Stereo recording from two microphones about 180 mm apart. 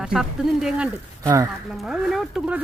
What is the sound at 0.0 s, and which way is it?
Speech, 5° right (ahead or behind).